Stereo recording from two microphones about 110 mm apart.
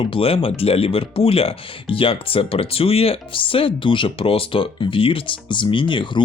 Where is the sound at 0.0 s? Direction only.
55° left (ahead or behind).